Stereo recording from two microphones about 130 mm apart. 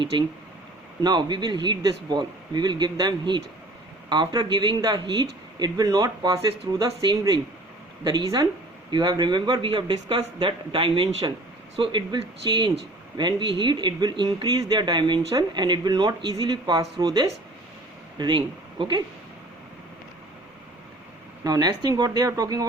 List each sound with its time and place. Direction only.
0.1 s speech: 35° right (ahead or behind)
21.4 s speech: 30° right (ahead or behind)